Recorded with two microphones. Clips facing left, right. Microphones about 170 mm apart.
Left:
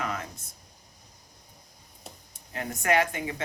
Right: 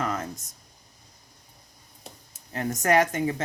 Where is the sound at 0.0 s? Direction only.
40° right (ahead or behind).